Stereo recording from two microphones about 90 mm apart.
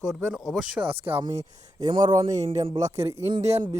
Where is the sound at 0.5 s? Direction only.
15° right (ahead or behind).